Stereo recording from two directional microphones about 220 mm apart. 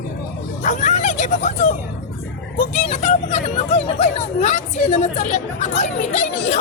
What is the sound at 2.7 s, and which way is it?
Speech, 30° left (ahead or behind).